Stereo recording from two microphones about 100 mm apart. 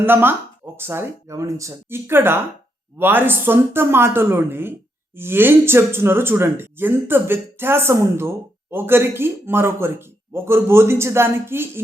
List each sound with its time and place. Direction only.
0.0 s speech: 20° right (ahead or behind)